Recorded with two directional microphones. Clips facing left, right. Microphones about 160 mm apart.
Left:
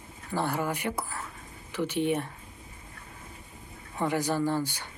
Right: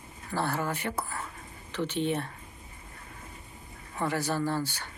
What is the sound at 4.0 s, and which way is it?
Speech, 15° left (ahead or behind).